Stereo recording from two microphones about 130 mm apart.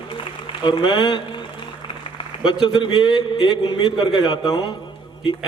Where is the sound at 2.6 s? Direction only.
45° left (ahead or behind).